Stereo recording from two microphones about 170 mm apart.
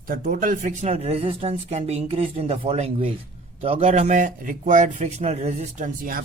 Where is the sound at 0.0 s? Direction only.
55° right (ahead or behind).